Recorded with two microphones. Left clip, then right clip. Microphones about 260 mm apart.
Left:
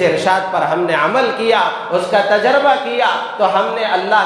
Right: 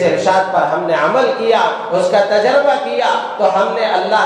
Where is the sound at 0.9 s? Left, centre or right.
Left.